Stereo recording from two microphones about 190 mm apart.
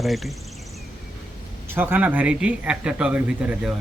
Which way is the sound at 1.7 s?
10° right (ahead or behind).